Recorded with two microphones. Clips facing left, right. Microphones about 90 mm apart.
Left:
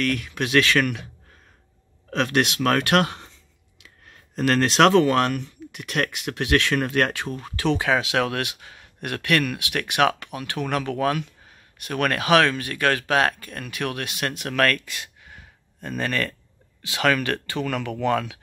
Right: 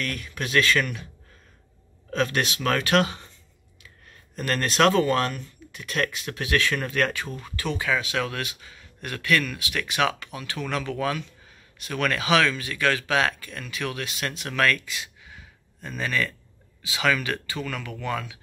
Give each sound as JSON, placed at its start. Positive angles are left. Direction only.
{"t": 0.0, "sound": "speech", "side_deg": 75}
{"t": 2.0, "sound": "speech", "side_deg": 70}
{"t": 3.8, "sound": "speech", "side_deg": 90}
{"t": 7.4, "sound": "speech", "side_deg": 90}